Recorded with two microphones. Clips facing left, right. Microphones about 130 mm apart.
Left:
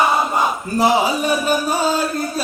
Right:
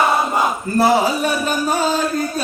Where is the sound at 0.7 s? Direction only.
15° left (ahead or behind).